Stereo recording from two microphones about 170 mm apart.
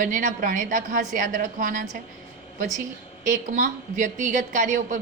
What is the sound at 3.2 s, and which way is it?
A woman's voice, 50° right (ahead or behind).